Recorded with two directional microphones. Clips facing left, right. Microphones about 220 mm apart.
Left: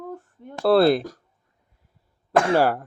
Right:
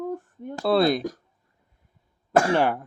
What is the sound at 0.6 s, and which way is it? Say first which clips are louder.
Speech: left 4 dB; 5° left (ahead or behind).